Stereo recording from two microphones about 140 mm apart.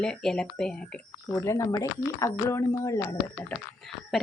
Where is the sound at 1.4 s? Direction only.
20° left (ahead or behind).